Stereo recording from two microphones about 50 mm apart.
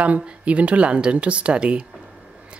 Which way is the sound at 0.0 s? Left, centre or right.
Right.